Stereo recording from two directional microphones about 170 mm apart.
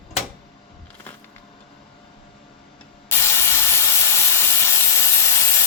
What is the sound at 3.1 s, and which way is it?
Wood, 15° left (ahead or behind).